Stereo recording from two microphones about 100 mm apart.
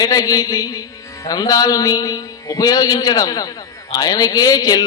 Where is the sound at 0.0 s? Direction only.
40° left (ahead or behind).